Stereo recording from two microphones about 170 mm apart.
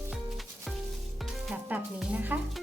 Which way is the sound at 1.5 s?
5° right (ahead or behind).